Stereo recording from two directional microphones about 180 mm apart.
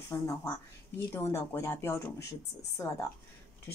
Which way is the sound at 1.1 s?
15° left (ahead or behind).